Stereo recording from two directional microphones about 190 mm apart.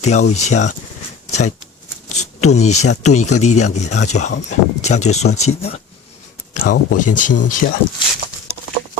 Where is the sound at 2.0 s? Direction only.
35° left (ahead or behind).